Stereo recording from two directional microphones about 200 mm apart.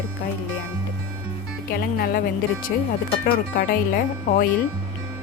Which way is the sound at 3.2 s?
50° left (ahead or behind).